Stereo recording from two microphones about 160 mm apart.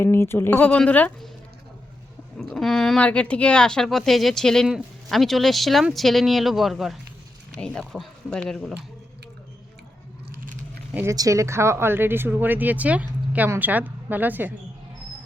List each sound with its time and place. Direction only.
0.0 s speech: 15° left (ahead or behind)
2.4 s speech: centre (ahead or behind)
10.4 s a sound: 55° right (ahead or behind)
10.9 s speech: 20° right (ahead or behind)